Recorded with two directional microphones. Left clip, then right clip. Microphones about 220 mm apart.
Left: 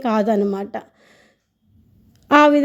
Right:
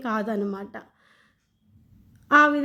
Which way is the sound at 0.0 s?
30° left (ahead or behind).